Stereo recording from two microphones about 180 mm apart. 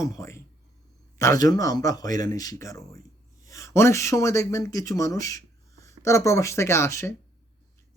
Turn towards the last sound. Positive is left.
turn(degrees=15)  # may be behind; listen again after turning